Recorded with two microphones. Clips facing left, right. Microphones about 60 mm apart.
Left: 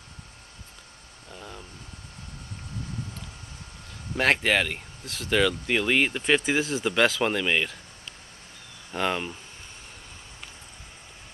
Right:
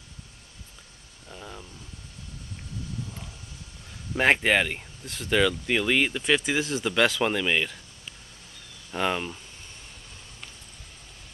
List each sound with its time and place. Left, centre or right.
1.3 s a sound: centre
4.2 s speech: centre
8.9 s speech: centre